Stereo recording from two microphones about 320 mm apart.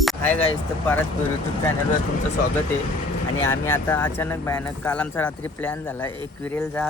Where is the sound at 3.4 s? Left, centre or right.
Centre.